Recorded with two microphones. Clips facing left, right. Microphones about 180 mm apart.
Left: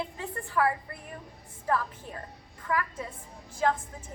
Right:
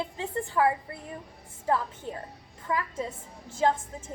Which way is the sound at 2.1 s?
25° right (ahead or behind).